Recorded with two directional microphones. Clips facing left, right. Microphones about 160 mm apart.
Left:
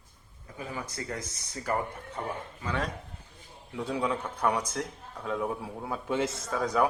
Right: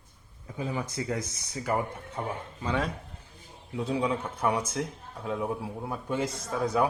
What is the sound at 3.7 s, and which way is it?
Speech, 15° right (ahead or behind).